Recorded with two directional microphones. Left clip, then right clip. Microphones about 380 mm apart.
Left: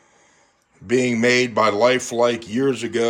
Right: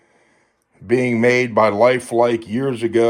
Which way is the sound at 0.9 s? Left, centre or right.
Centre.